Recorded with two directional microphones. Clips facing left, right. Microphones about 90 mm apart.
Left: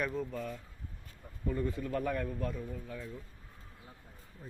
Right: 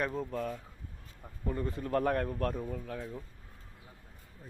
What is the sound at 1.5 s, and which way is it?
Speech, 30° right (ahead or behind).